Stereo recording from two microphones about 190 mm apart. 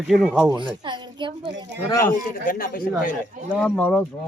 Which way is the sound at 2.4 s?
50° left (ahead or behind).